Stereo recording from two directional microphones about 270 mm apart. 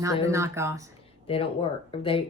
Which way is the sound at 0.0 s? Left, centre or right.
Centre.